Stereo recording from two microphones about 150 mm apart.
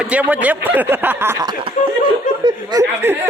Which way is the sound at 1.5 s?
35° right (ahead or behind).